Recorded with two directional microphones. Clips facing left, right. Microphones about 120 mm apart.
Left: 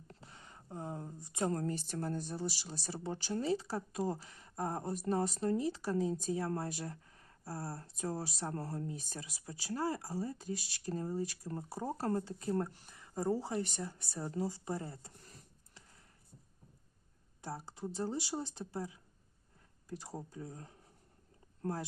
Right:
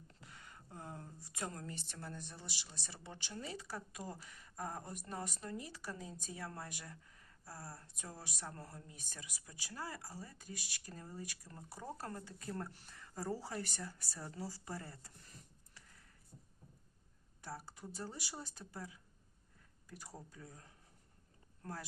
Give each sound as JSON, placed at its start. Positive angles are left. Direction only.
{"t": 0.1, "sound": "a sound", "side_deg": 30}
{"t": 1.5, "sound": "speech", "side_deg": 40}
{"t": 17.4, "sound": "speech", "side_deg": 25}